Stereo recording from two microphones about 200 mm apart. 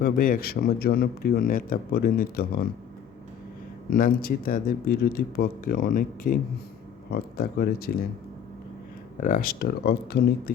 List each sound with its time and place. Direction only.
0.0 s speech: 45° left (ahead or behind)
3.9 s speech: 45° left (ahead or behind)
9.2 s speech: 45° left (ahead or behind)